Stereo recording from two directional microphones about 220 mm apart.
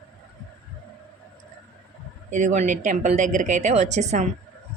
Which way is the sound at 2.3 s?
35° right (ahead or behind).